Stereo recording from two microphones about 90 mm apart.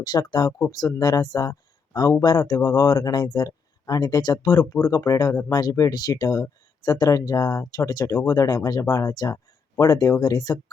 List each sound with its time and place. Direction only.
0.0 s speech: 50° left (ahead or behind)
4.7 s speech: 35° left (ahead or behind)